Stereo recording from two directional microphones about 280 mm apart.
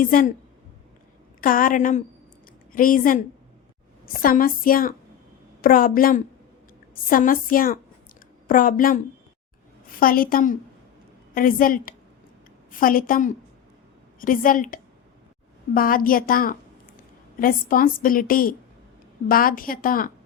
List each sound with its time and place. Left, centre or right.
0.0 s a woman's voice: left
1.4 s a woman's voice: left
10.0 s a woman's voice: left